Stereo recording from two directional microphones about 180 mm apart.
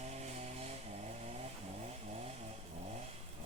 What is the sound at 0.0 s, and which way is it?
Vehicle, 40° right (ahead or behind).